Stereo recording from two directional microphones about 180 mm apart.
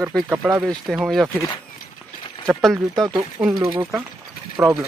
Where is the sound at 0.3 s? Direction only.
10° right (ahead or behind).